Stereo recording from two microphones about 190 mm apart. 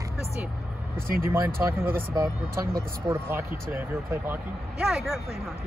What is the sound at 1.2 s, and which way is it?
Speech, 15° right (ahead or behind).